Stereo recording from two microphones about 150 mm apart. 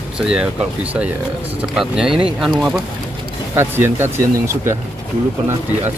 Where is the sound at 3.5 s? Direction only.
15° right (ahead or behind).